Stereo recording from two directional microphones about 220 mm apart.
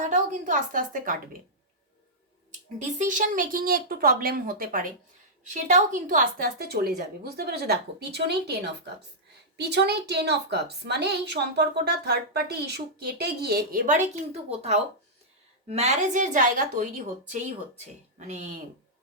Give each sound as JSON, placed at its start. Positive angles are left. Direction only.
{"t": 0.0, "sound": "a woman's voice", "side_deg": -35}
{"t": 2.7, "sound": "a woman's voice", "side_deg": -35}
{"t": 9.6, "sound": "a woman's voice", "side_deg": -50}
{"t": 18.3, "sound": "speech", "side_deg": -30}